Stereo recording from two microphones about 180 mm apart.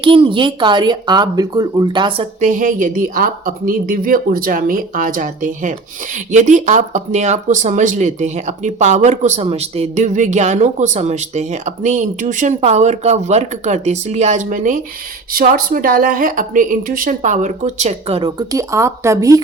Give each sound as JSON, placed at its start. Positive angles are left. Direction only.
{"t": 0.0, "sound": "speech", "side_deg": -30}
{"t": 2.4, "sound": "a woman's voice", "side_deg": -45}
{"t": 18.3, "sound": "speech", "side_deg": -15}